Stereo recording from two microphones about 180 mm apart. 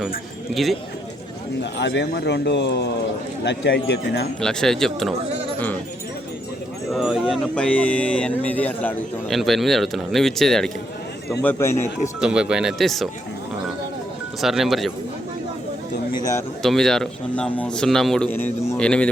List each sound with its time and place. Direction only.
0.5 s speech: centre (ahead or behind)
1.8 s speech: 75° left (ahead or behind)
4.4 s speech: 5° left (ahead or behind)
6.9 s speech: centre (ahead or behind)
11.4 s speech: 15° left (ahead or behind)
12.2 s speech: 5° right (ahead or behind)
14.4 s speech: centre (ahead or behind)
16.6 s speech: 5° left (ahead or behind)